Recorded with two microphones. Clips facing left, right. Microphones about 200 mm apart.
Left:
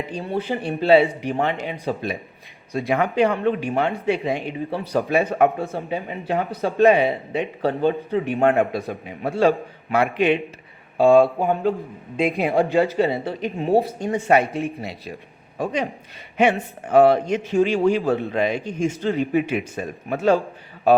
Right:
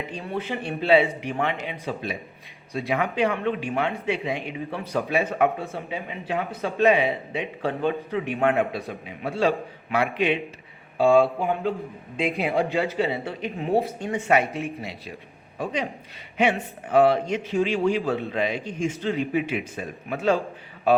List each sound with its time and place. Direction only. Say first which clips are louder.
0.2 s a man's voice: left 5 dB; 30° left (ahead or behind); by 3.3 s 50° left (ahead or behind)
3.4 s a man's voice: left 4 dB; 40° left (ahead or behind)
8.4 s a man's voice: left 3 dB; 50° left (ahead or behind)